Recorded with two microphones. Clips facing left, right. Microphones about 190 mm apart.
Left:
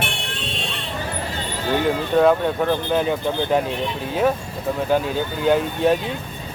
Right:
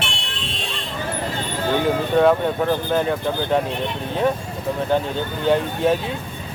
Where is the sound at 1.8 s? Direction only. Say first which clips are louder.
Even; centre (ahead or behind).